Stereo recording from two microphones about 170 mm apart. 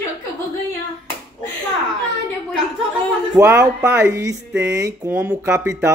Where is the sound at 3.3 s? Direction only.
15° right (ahead or behind).